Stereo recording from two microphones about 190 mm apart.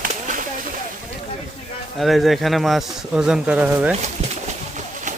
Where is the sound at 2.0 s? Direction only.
Centre (ahead or behind).